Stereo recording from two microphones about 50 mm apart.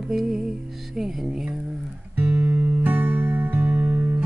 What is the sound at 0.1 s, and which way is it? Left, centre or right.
Music, centre.